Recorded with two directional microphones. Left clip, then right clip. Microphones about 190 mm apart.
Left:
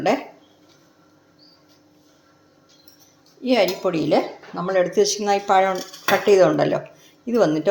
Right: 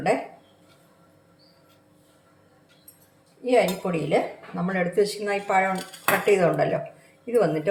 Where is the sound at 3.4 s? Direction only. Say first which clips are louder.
Left 2 dB; 45° left (ahead or behind).